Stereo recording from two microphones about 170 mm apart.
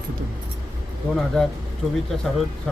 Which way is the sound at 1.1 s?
5° left (ahead or behind).